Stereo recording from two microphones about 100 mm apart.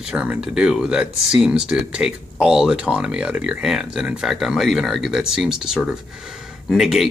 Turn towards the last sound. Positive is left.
turn(degrees=-5)  # may be behind; listen again after turning